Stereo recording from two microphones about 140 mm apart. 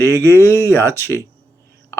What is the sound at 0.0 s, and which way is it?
Speech, 15° left (ahead or behind).